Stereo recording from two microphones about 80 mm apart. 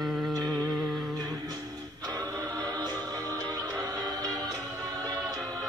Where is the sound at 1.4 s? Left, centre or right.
Right.